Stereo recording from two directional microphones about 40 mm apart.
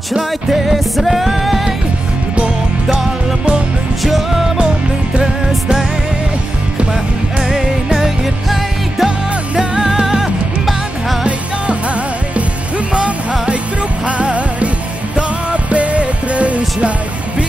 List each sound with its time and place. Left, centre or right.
0.5 s music: centre
4.0 s music: centre
6.9 s music: centre
8.0 s music: centre
9.6 s music: centre
10.0 s music: centre
14.0 s music: right